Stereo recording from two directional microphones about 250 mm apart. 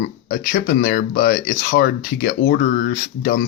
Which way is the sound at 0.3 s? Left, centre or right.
Left.